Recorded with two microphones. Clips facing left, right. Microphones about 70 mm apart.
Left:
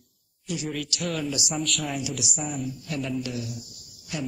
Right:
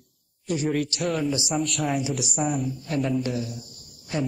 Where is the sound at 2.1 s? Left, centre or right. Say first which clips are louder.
Right 6 dB; right.